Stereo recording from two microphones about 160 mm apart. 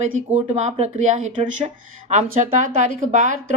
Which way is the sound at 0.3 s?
45° right (ahead or behind).